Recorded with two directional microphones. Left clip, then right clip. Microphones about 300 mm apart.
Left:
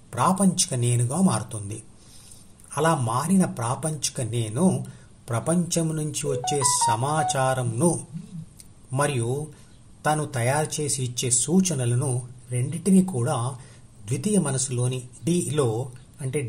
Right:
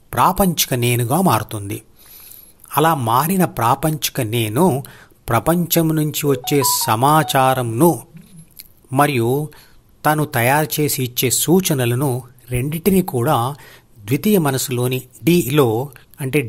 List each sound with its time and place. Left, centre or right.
0.1 s speech: right
8.5 s a sound: right
10.0 s speech: right